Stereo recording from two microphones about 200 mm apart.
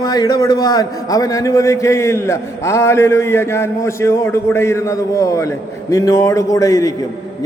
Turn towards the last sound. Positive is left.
turn(degrees=15)  # may be behind; listen again after turning